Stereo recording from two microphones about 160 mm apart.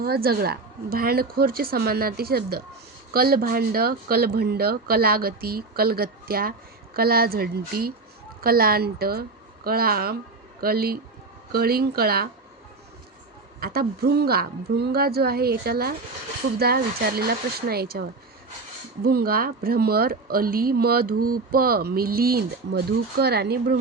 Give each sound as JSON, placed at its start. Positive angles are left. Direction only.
{"t": 0.0, "sound": "a woman's voice", "side_deg": -75}
{"t": 13.6, "sound": "a woman's voice", "side_deg": -70}